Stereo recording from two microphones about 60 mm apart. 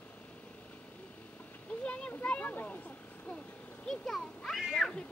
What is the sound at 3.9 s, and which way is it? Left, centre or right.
A child's voice, centre.